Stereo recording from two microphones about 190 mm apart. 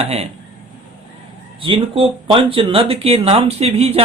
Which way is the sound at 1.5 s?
25° right (ahead or behind).